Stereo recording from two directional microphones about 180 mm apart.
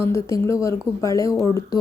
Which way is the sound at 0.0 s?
15° left (ahead or behind).